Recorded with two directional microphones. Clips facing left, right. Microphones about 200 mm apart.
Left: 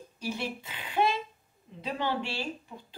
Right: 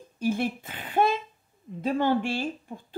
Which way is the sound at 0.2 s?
50° right (ahead or behind).